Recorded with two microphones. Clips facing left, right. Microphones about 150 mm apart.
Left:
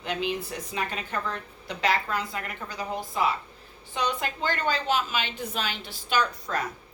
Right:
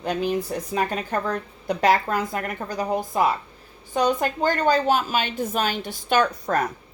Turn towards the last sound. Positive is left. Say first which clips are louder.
# right 6 dB
turn(degrees=-50)  # may be behind; listen again after turning